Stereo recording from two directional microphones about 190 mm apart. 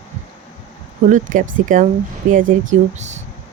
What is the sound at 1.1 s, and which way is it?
Speech, 40° right (ahead or behind).